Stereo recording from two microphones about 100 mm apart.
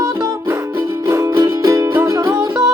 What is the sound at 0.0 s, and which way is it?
Music, 30° right (ahead or behind).